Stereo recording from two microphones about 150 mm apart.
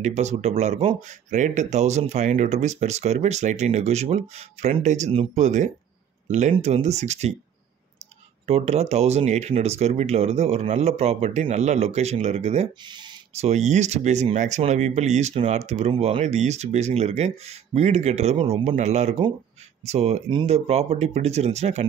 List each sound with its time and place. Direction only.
0.0 s speech: 50° right (ahead or behind)
8.5 s speech: 45° right (ahead or behind)
12.8 s speech: 30° right (ahead or behind)
13.3 s speech: 45° right (ahead or behind)